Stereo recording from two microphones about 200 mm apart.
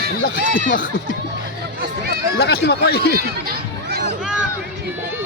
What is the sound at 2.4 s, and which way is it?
Speech, 50° left (ahead or behind).